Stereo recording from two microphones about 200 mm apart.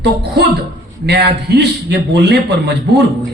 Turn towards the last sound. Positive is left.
turn(degrees=-55)  # may be behind; listen again after turning